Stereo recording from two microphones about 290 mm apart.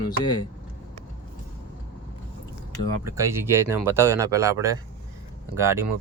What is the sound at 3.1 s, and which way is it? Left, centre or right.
Speech, centre.